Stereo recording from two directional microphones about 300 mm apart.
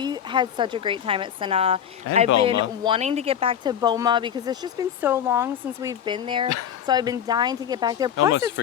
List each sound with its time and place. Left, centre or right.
0.0 s speech: centre
8.3 s speech: left